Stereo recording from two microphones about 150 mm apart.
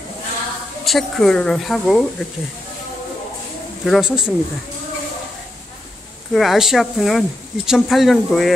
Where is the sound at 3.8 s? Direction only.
Centre (ahead or behind).